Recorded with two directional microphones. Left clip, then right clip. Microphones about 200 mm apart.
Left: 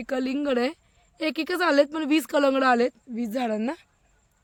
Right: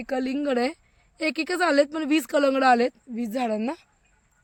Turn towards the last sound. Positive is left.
turn(degrees=-5)  # may be behind; listen again after turning